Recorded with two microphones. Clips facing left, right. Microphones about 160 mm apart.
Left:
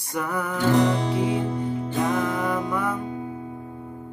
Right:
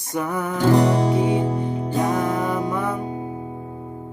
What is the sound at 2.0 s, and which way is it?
Music, 15° right (ahead or behind).